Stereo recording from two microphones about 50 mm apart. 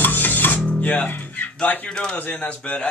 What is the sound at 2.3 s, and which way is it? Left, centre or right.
Speech, left.